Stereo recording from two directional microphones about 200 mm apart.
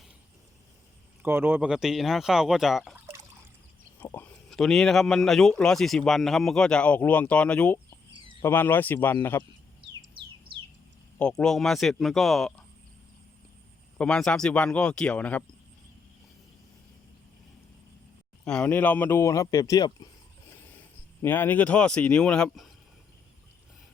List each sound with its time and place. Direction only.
1.2 s speech: 10° right (ahead or behind)
3.9 s speech: 10° left (ahead or behind)
9.8 s bird: 25° right (ahead or behind)
11.2 s speech: 5° left (ahead or behind)
14.0 s speech: 5° left (ahead or behind)
18.4 s speech: 5° left (ahead or behind)